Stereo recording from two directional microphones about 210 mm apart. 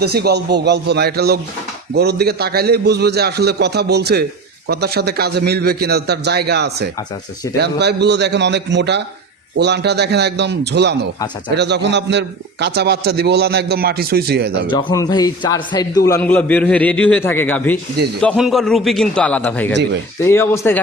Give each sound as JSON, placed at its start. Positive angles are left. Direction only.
{"t": 0.0, "sound": "a man's voice", "side_deg": -50}
{"t": 14.7, "sound": "a man's voice", "side_deg": 20}